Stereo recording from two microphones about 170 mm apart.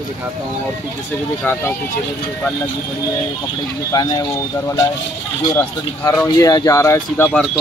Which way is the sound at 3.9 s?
20° left (ahead or behind).